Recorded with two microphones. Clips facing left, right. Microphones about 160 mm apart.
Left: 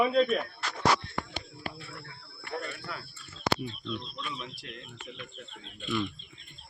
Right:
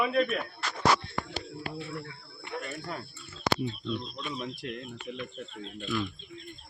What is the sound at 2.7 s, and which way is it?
Speech, 40° right (ahead or behind).